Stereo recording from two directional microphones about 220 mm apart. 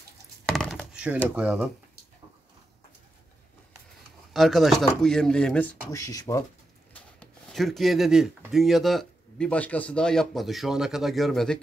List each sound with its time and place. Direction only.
0.5 s a sound: centre (ahead or behind)
1.3 s speech: 5° right (ahead or behind)
4.3 s speech: centre (ahead or behind)
6.9 s speech: 5° left (ahead or behind)